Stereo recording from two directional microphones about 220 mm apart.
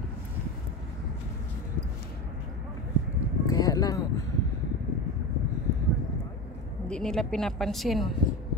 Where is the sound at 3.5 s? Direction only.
15° left (ahead or behind).